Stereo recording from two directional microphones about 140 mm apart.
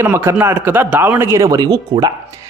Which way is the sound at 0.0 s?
20° right (ahead or behind).